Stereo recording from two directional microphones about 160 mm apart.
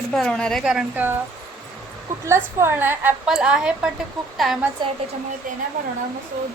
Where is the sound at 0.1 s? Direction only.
5° left (ahead or behind).